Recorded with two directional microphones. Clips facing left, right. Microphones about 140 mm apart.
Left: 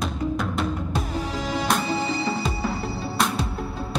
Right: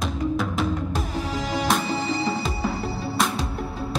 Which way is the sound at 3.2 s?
Centre (ahead or behind).